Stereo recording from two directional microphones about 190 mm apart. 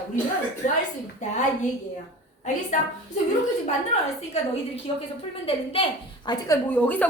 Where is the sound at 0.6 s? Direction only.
45° left (ahead or behind).